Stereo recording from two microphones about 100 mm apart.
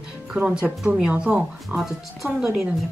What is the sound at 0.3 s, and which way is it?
Speech, 10° right (ahead or behind).